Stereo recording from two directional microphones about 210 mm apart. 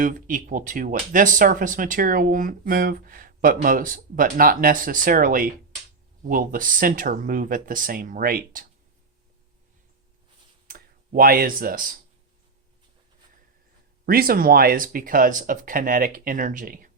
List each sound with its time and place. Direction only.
0.0 s speech: 40° right (ahead or behind)
10.7 s speech: 45° right (ahead or behind)
14.0 s speech: 45° right (ahead or behind)